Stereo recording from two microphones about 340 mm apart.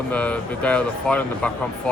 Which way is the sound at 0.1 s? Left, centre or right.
Centre.